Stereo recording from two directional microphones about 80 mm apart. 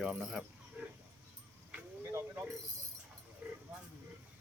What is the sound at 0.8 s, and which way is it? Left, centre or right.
Dog, centre.